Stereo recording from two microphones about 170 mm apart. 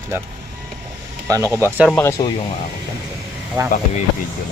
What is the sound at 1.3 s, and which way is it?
Speech, 15° right (ahead or behind).